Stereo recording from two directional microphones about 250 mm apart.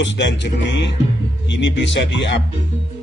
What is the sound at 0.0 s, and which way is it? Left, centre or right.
Speech, left.